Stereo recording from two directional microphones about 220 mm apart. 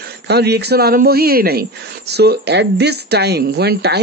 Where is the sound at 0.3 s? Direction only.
50° right (ahead or behind).